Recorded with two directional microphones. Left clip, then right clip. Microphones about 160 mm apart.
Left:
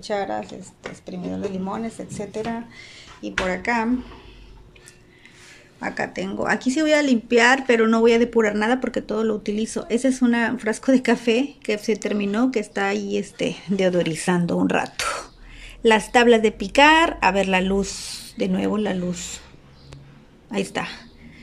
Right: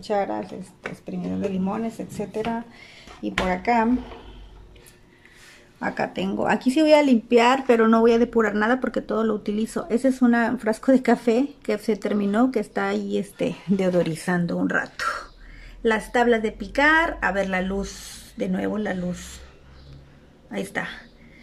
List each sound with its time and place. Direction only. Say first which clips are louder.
0.0 s speech: right 1 dB; 5° right (ahead or behind)
0.4 s speech: even; 20° left (ahead or behind)
1.3 s speech: right 1 dB; 5° right (ahead or behind)
5.8 s speech: even; 10° right (ahead or behind); by 19.3 s 10° left (ahead or behind)
20.5 s speech: left 3 dB; 10° left (ahead or behind)